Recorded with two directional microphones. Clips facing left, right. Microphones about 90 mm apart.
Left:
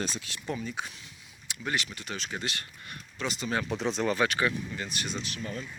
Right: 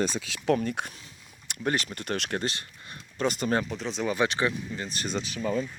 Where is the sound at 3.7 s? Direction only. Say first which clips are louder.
Left 2 dB; centre (ahead or behind).